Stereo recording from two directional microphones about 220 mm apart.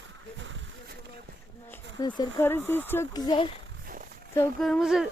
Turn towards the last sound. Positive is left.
turn(degrees=0)  # may be behind; listen again after turning